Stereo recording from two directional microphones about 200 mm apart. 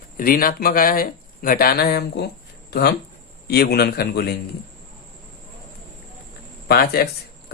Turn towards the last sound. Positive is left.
turn(degrees=50)  # may be behind; listen again after turning